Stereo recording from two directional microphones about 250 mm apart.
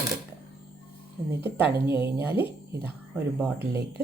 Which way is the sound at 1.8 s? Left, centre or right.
Centre.